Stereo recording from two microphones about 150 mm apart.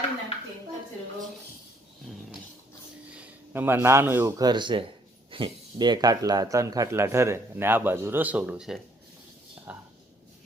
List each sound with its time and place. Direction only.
3.2 s speech: 15° right (ahead or behind)